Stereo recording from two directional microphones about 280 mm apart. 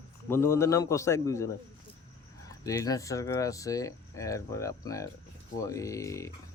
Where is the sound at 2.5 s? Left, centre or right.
Centre.